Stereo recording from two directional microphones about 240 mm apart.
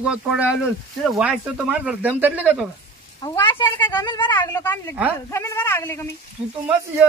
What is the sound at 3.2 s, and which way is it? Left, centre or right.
Speech, centre.